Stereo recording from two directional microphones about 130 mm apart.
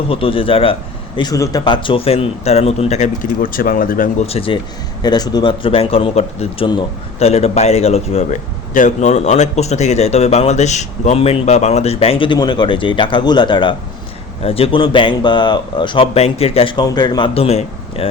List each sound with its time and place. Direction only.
0.1 s a man's voice: 45° left (ahead or behind); by 4.1 s 90° left
4.3 s a man's voice: 45° left (ahead or behind)
5.0 s a man's voice: 30° left (ahead or behind); by 8.4 s 55° left (ahead or behind)
8.7 s speech: 70° left (ahead or behind); by 13.7 s 40° left (ahead or behind)
14.4 s speech: 50° left (ahead or behind)
16.1 s a man's voice: 50° left (ahead or behind)
16.7 s speech: 30° left (ahead or behind)
17.3 s speech: 50° left (ahead or behind)